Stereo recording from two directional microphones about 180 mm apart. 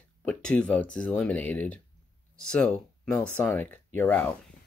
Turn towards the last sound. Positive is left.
turn(degrees=10)  # may be behind; listen again after turning